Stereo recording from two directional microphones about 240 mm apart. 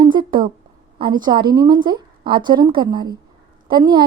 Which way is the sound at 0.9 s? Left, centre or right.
Centre.